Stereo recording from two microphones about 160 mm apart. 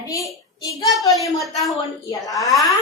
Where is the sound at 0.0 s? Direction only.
20° left (ahead or behind).